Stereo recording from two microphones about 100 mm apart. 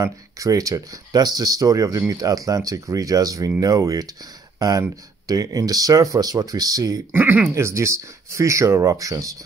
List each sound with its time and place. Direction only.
0.0 s speech: 35° right (ahead or behind)
7.1 s speech: 20° right (ahead or behind)
7.5 s speech: 30° right (ahead or behind)